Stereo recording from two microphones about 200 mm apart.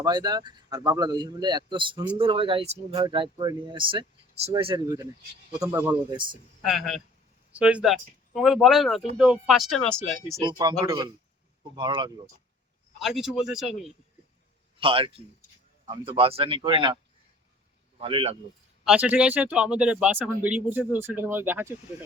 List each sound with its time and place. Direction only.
0.0 s speech: 20° right (ahead or behind)
6.1 s speech: 25° right (ahead or behind)
6.7 s speech: centre (ahead or behind)
10.4 s speech: 20° right (ahead or behind)
13.0 s speech: centre (ahead or behind)
14.8 s speech: 25° right (ahead or behind)
18.9 s speech: 5° right (ahead or behind)